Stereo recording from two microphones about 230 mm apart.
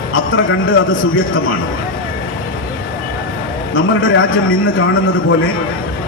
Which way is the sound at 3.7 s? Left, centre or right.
Left.